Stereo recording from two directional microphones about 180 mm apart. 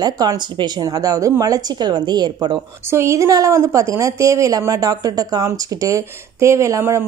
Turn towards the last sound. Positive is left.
turn(degrees=-15)  # may be behind; listen again after turning